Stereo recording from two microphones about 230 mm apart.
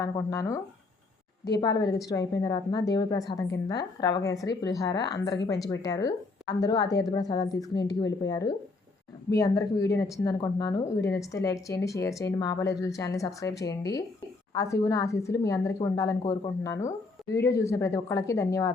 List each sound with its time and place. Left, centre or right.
0.0 s a woman's voice: centre